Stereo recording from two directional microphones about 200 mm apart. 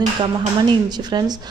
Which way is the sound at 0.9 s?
20° right (ahead or behind).